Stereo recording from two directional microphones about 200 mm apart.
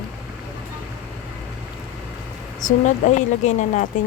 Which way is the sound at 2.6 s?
40° left (ahead or behind).